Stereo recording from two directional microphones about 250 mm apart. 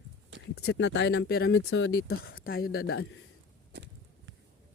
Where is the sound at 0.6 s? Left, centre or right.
Left.